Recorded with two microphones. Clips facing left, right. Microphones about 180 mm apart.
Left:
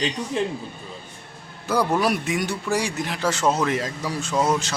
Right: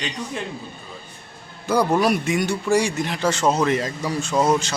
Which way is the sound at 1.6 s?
5° left (ahead or behind).